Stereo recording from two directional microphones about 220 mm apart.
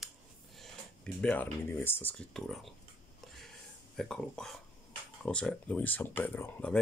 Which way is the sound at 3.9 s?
5° left (ahead or behind).